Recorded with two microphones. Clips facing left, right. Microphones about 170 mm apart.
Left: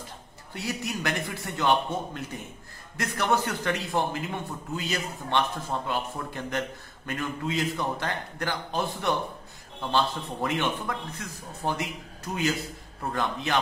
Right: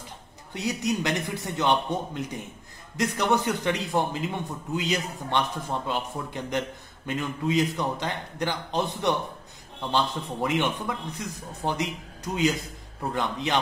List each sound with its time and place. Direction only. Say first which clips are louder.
0.5 s a man's voice: right 5 dB; 20° right (ahead or behind)
13.1 s a man's voice: right 1 dB; 20° right (ahead or behind)